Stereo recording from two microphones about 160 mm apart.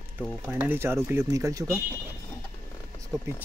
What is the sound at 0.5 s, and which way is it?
Speech, 10° right (ahead or behind).